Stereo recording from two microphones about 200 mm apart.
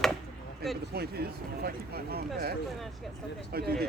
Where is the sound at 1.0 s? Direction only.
50° right (ahead or behind).